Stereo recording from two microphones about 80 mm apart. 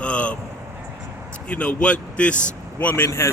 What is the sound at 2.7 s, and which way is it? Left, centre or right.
Speech, left.